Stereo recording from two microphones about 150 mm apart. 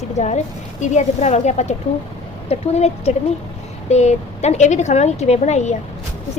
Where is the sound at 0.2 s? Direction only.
50° left (ahead or behind).